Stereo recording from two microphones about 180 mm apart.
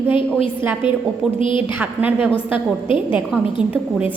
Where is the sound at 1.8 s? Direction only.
10° right (ahead or behind).